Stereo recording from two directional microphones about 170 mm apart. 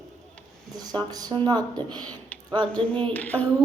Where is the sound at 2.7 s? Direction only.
5° left (ahead or behind).